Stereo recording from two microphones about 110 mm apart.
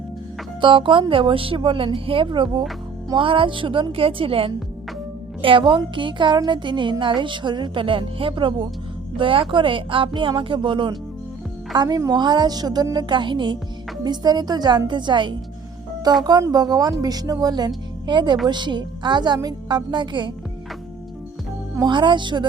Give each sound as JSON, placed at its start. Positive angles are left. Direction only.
{"t": 0.6, "sound": "a woman's voice", "side_deg": -50}
{"t": 21.8, "sound": "a woman's voice", "side_deg": -45}